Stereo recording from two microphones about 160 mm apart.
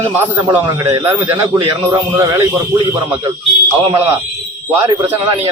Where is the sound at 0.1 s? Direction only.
15° right (ahead or behind).